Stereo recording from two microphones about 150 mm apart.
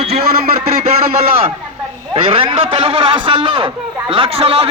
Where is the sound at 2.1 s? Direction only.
35° right (ahead or behind).